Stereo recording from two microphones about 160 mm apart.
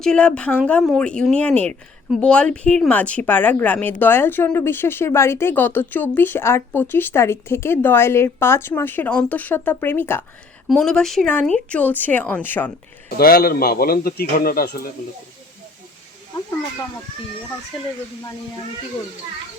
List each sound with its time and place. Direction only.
0.0 s speech: 5° left (ahead or behind)
13.1 s a man's voice: 65° left (ahead or behind)